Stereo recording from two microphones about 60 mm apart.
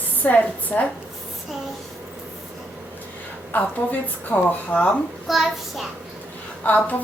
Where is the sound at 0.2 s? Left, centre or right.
Left.